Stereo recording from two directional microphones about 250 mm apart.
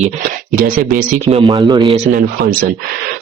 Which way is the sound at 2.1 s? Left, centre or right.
Right.